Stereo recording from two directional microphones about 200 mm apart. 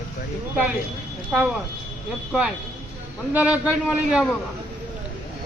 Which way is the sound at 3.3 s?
5° right (ahead or behind).